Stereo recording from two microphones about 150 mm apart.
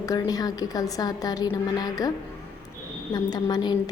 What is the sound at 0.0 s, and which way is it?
A woman's voice, 25° left (ahead or behind).